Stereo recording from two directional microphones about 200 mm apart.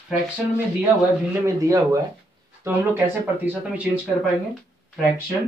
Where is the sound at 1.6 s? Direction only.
15° right (ahead or behind).